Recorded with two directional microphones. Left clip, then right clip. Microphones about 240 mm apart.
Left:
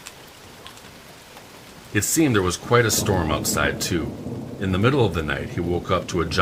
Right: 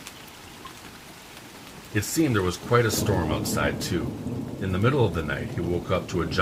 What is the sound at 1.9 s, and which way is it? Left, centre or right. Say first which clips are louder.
Speech: left 5 dB; left.